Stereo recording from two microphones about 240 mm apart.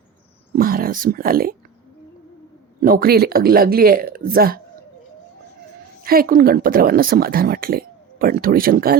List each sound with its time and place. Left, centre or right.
0.5 s speech: right
2.8 s speech: right
6.1 s speech: right